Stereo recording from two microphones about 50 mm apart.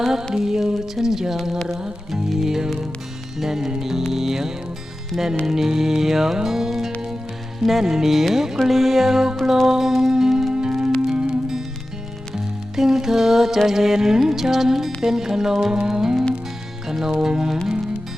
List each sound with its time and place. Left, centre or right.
0.0 s music: centre